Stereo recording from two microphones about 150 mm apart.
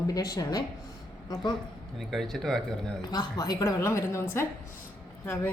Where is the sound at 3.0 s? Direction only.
25° left (ahead or behind).